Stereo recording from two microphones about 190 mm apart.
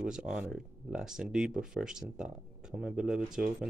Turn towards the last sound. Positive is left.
turn(degrees=-5)  # may be behind; listen again after turning